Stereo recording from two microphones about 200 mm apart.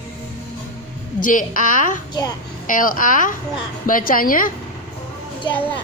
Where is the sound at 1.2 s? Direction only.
40° left (ahead or behind).